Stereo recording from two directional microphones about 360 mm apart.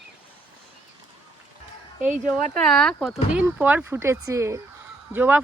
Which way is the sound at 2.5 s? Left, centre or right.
Centre.